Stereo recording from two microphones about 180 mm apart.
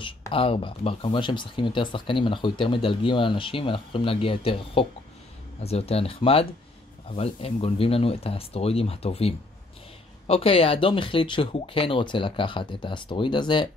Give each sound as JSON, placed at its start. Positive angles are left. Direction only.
{"t": 0.3, "sound": "speech", "side_deg": 30}